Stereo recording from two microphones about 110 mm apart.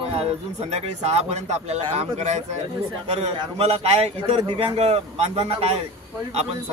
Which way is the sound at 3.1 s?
65° right (ahead or behind).